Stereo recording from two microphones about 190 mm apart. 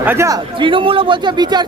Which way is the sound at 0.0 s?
10° right (ahead or behind).